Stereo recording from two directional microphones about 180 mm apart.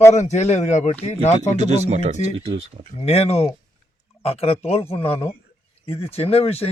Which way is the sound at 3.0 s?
35° left (ahead or behind).